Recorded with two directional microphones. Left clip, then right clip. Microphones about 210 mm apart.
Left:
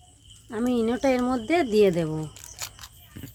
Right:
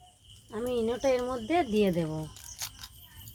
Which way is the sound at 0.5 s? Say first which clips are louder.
Left 4 dB; 45° left (ahead or behind).